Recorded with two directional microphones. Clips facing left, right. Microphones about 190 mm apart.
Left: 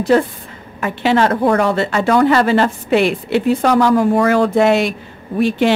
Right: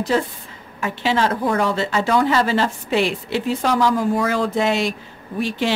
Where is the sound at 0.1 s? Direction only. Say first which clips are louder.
Left 6 dB; 60° left (ahead or behind).